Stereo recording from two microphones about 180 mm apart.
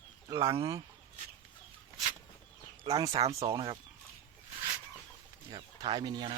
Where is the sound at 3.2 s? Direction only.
35° right (ahead or behind).